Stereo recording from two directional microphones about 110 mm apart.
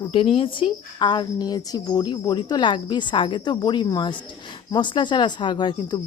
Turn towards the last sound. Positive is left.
turn(degrees=45)  # may be behind; listen again after turning